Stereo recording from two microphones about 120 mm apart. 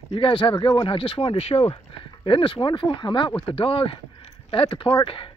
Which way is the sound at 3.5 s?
50° left (ahead or behind).